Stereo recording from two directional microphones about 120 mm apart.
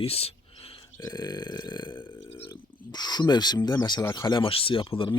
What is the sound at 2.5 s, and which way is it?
Speech, 35° left (ahead or behind).